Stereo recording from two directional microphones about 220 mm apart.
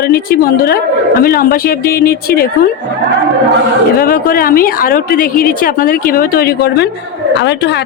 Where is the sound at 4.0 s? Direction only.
40° left (ahead or behind).